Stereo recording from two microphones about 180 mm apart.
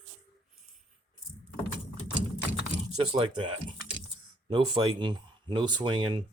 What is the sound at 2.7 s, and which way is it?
Speech, 30° right (ahead or behind).